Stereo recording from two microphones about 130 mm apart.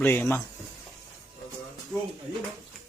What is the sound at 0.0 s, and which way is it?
Speech, 15° left (ahead or behind).